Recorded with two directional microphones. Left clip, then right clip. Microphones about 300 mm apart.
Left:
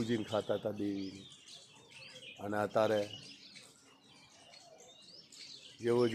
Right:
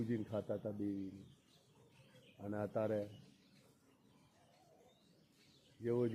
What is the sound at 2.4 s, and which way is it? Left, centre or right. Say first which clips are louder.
Speech: left 9 dB; centre.